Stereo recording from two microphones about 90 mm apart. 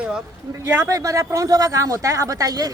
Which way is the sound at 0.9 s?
40° right (ahead or behind).